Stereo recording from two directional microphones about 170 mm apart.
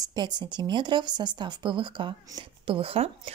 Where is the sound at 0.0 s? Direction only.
25° right (ahead or behind).